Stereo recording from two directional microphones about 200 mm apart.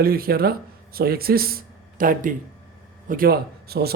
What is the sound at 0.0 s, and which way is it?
Speech, 50° right (ahead or behind).